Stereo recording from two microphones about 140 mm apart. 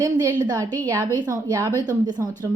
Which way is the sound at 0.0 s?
25° right (ahead or behind).